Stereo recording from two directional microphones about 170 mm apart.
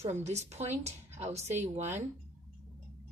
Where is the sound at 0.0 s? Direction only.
40° right (ahead or behind).